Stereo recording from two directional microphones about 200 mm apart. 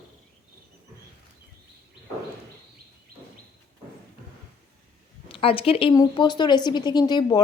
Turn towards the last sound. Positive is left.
turn(degrees=20)  # may be behind; listen again after turning